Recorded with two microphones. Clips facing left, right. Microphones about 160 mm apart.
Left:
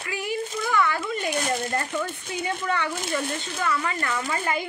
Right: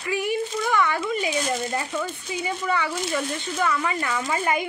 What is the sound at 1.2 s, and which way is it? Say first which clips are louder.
Speech: right 1 dB; 60° left (ahead or behind).